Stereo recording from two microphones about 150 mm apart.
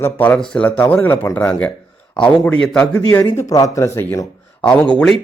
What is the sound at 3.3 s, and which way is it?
Speech, 20° left (ahead or behind).